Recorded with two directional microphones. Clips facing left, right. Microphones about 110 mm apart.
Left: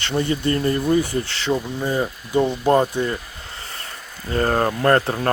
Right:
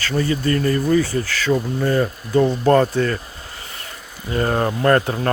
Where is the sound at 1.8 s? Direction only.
15° left (ahead or behind).